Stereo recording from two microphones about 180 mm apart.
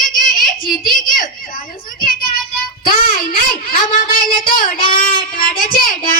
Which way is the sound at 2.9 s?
50° left (ahead or behind).